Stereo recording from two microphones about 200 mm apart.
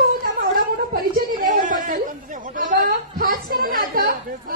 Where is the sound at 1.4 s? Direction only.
40° right (ahead or behind).